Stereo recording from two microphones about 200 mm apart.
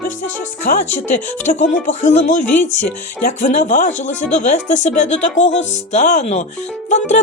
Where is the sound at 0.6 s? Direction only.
40° left (ahead or behind).